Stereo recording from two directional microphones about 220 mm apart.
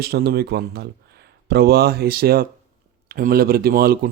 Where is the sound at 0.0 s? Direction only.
45° right (ahead or behind).